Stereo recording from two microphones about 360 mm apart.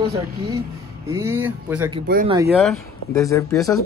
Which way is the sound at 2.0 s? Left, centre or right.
Right.